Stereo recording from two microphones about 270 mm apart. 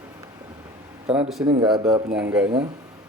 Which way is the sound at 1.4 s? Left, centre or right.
Centre.